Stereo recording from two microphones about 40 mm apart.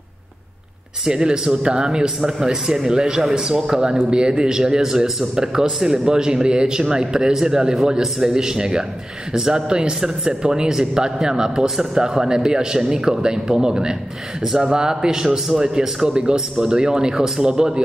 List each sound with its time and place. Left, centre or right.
1.0 s a man's voice: centre
3.7 s a man's voice: right